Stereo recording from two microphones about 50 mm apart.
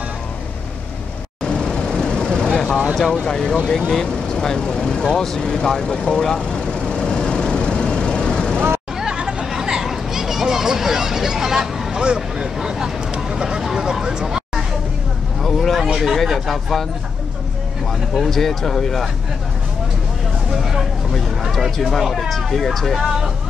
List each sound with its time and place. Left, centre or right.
1.4 s vehicle: centre
3.3 s speech: centre
6.2 s vehicle: centre
9.0 s chatter: centre
9.5 s a sound: centre
12.0 s vehicle: centre
15.4 s a sound: centre
16.0 s speech: centre
18.1 s speech: centre
21.4 s speech: centre